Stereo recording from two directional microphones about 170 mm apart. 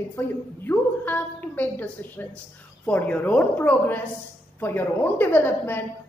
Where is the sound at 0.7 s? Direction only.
10° left (ahead or behind).